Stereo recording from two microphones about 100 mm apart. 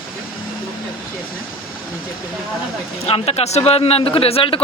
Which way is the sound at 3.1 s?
85° left.